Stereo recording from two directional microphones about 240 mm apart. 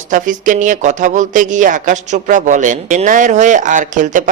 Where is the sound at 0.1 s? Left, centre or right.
Right.